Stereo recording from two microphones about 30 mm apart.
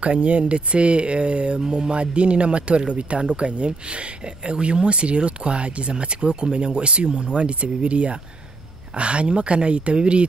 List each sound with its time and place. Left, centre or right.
0.2 s speech: right